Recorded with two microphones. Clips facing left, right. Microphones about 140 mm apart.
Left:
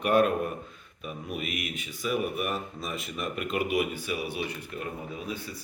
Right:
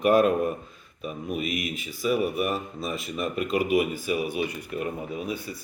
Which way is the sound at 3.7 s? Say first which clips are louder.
Right 5 dB; 45° right (ahead or behind).